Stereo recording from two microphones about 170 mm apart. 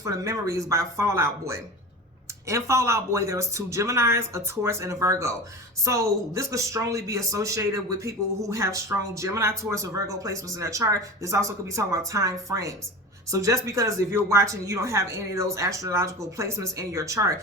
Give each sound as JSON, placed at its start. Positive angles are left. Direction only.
{"t": 0.0, "sound": "a woman's voice", "side_deg": -20}